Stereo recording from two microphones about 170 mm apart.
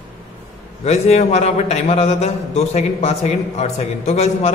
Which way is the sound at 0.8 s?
40° left (ahead or behind).